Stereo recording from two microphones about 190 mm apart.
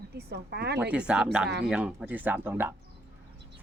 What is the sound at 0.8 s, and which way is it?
Speech, 5° right (ahead or behind).